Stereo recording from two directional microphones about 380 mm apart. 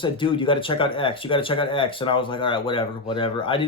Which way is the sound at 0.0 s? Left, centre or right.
Centre.